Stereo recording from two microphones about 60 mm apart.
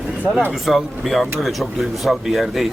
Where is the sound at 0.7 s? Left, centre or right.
Centre.